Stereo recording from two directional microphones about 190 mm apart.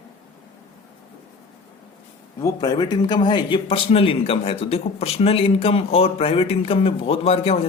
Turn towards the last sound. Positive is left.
turn(degrees=30)  # may be behind; listen again after turning